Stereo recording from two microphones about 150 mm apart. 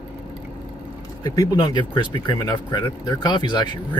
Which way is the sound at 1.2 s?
25° left (ahead or behind).